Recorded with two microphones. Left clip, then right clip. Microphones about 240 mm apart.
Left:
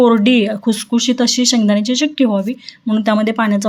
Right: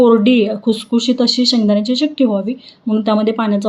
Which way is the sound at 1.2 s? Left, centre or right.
Left.